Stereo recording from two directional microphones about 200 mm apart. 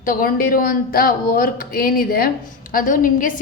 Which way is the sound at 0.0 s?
45° left (ahead or behind).